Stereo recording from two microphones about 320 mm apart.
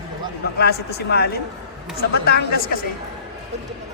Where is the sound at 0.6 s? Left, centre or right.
Left.